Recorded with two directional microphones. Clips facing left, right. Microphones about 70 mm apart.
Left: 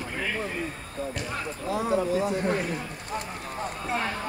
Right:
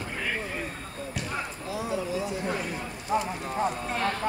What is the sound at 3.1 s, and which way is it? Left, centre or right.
Speech, right.